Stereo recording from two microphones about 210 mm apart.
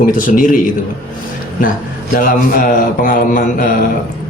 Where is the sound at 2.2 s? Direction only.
40° left (ahead or behind).